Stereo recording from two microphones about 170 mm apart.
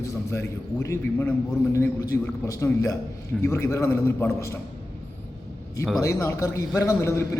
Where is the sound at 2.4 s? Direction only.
20° left (ahead or behind).